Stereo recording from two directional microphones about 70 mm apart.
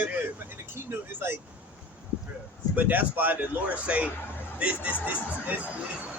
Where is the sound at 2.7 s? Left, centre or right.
Right.